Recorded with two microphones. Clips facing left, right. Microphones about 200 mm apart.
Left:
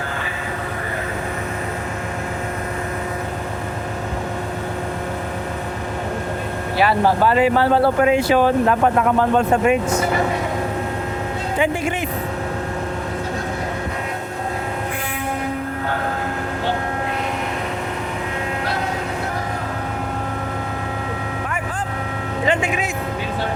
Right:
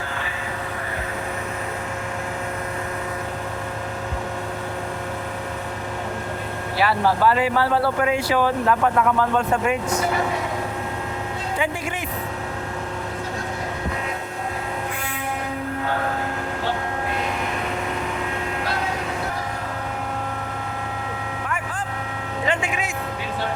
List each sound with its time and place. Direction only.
6.7 s speech: 20° left (ahead or behind)
11.5 s speech: 20° left (ahead or behind)
22.4 s a sound: 20° left (ahead or behind)